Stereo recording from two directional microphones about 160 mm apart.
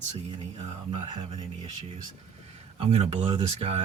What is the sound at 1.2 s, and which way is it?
Speech, 30° right (ahead or behind).